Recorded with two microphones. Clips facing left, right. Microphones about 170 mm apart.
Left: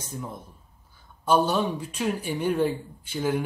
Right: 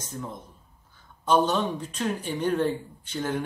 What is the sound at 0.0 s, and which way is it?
Speech, 10° left (ahead or behind).